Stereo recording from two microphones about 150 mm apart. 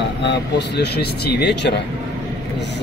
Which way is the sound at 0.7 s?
90° left.